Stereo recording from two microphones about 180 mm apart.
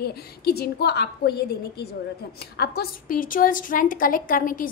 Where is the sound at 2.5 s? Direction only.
60° left (ahead or behind).